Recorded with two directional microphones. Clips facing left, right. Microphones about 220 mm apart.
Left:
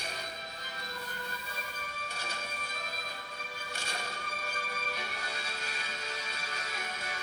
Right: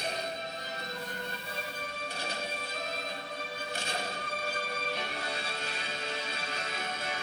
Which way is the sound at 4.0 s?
35° right (ahead or behind).